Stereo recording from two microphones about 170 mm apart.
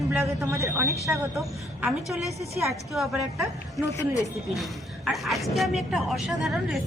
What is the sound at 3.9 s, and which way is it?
Speech, 20° left (ahead or behind).